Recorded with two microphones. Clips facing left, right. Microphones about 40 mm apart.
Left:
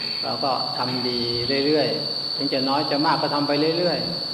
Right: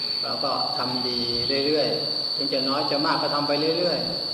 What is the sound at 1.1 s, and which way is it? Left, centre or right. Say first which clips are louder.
A man's voice: left 2 dB; centre.